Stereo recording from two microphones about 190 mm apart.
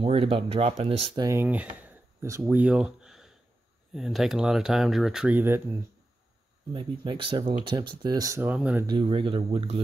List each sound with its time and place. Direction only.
0.0 s speech: 30° right (ahead or behind)
1.2 s speech: 10° right (ahead or behind)
6.7 s speech: 25° right (ahead or behind); by 8.8 s 5° right (ahead or behind)
8.8 s speech: 30° right (ahead or behind)